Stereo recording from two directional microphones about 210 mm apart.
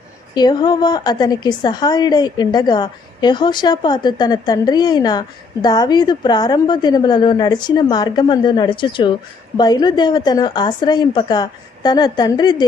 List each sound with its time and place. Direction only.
0.3 s a woman's voice: 20° left (ahead or behind)